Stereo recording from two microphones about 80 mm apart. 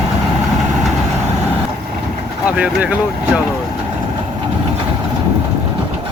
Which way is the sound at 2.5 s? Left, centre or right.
Centre.